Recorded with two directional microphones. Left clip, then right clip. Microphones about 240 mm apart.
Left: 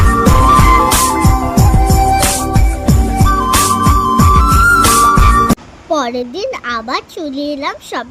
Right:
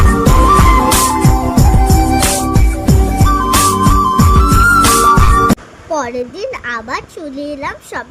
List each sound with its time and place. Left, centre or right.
0.1 s music: centre
6.7 s a child's voice: centre